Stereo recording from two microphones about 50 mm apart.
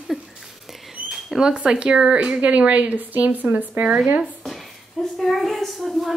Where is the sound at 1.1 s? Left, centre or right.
Centre.